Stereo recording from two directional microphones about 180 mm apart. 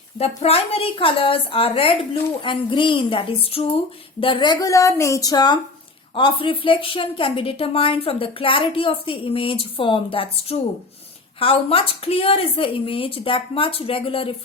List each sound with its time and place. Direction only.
0.2 s a woman's voice: 35° left (ahead or behind)